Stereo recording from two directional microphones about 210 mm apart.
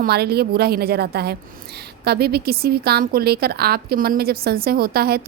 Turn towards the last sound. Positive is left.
turn(degrees=-45)  # may be behind; listen again after turning